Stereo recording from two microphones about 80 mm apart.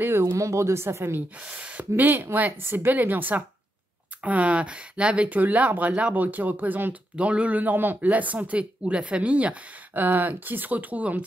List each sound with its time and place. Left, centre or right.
0.0 s speech: right
1.4 s speech: centre
2.0 s speech: right